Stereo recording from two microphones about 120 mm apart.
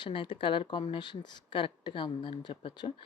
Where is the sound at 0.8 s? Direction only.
45° left (ahead or behind).